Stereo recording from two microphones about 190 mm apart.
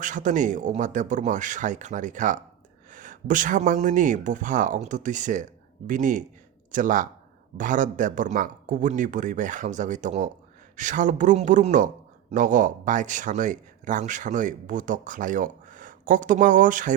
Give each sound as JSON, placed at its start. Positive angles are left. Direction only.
{"t": 0.0, "sound": "speech", "side_deg": -40}